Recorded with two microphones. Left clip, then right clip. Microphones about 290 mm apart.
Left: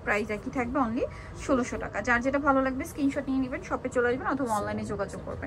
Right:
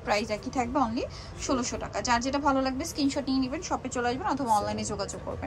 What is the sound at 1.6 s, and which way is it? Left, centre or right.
Speech, centre.